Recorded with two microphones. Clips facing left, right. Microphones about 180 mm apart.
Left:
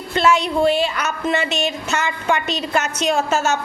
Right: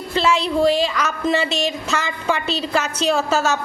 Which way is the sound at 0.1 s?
30° right (ahead or behind).